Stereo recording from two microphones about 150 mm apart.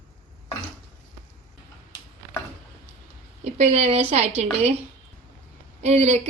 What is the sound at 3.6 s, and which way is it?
Speech, 50° right (ahead or behind).